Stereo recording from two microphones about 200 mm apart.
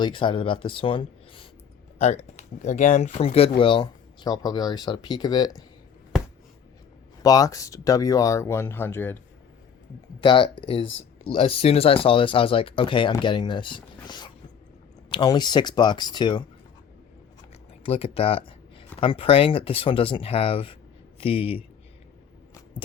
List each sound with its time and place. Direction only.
0.0 s speech: 25° left (ahead or behind)
7.2 s speech: 20° left (ahead or behind)
10.2 s speech: 25° left (ahead or behind)
10.8 s a sound: 70° left (ahead or behind)
11.3 s speech: 30° left (ahead or behind)
17.8 s speech: 30° left (ahead or behind)